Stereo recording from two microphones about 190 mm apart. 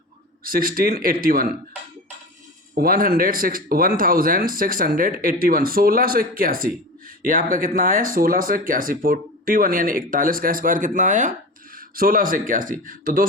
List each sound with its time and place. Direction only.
0.4 s speech: 50° right (ahead or behind)
2.7 s speech: 50° right (ahead or behind)